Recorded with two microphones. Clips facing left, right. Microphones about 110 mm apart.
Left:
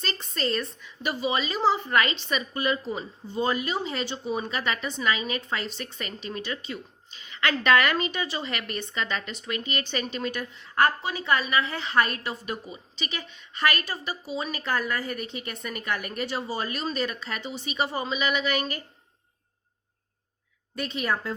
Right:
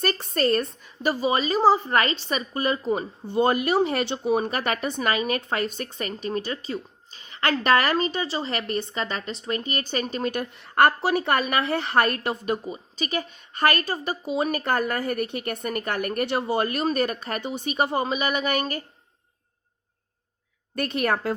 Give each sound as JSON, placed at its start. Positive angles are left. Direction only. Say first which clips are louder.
{"t": 0.0, "sound": "a woman's voice", "louder": "right 7 dB", "side_deg": -55}
{"t": 20.7, "sound": "a woman's voice", "louder": "right 4 dB", "side_deg": -55}